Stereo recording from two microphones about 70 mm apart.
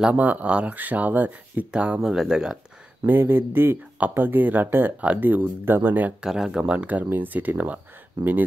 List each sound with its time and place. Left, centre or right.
0.1 s speech: right
3.1 s speech: right
6.2 s speech: centre; by 7.8 s right